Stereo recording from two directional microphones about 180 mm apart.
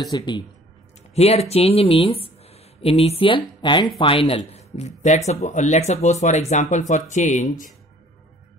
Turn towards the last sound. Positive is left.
turn(degrees=45)  # may be behind; listen again after turning